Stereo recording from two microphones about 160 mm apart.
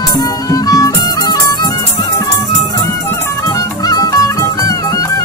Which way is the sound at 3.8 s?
25° left (ahead or behind).